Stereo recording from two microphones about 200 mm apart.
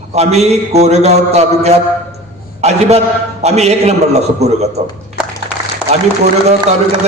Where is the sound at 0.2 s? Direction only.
35° right (ahead or behind).